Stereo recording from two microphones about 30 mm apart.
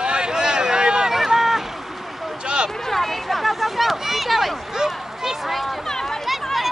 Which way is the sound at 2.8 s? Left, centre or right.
Centre.